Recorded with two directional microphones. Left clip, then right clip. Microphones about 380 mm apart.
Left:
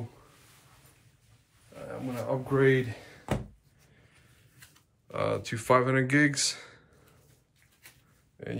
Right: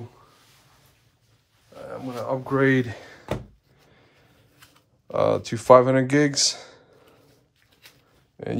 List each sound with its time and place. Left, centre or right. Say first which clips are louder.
1.9 s speech: right 4 dB; centre
4.6 s speech: right 3 dB; centre